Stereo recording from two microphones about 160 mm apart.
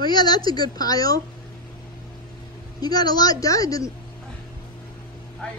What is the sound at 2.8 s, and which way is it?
A woman's voice, 25° left (ahead or behind).